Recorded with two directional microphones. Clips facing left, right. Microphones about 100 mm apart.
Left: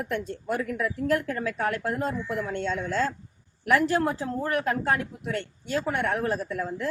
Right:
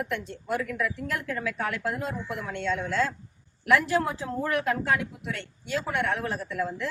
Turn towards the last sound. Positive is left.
turn(degrees=40)  # may be behind; listen again after turning